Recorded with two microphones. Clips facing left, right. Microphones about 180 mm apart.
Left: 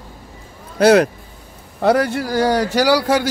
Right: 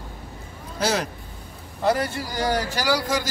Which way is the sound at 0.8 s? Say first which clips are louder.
Left 13 dB; 60° left (ahead or behind).